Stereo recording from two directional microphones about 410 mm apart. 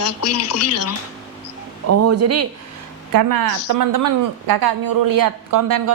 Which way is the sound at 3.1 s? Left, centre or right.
Right.